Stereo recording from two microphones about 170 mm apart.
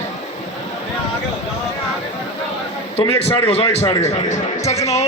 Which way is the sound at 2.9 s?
35° left (ahead or behind).